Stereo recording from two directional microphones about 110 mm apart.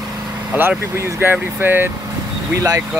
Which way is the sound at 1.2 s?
20° right (ahead or behind).